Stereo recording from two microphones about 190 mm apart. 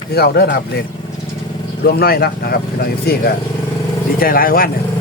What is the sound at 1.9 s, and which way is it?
Speech, 55° left (ahead or behind).